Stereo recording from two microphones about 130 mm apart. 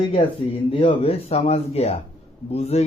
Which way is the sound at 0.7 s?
45° left (ahead or behind).